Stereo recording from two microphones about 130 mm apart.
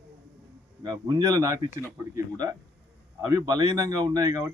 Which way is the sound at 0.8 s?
30° right (ahead or behind).